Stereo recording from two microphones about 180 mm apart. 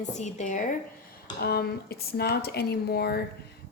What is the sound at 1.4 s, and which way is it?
A woman's voice, 60° left (ahead or behind).